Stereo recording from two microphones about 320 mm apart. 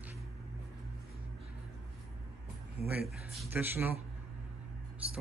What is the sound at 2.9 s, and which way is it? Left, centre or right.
Speech, centre.